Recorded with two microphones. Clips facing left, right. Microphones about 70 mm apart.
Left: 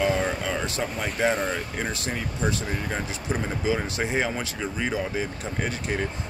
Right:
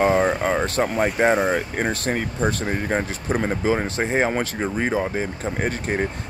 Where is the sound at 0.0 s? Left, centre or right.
Right.